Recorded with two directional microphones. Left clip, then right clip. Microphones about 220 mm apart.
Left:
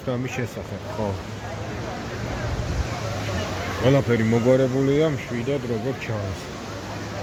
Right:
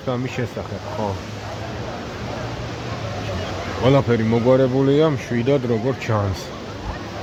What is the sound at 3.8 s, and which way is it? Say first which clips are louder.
Speech: right 3 dB; 5° right (ahead or behind).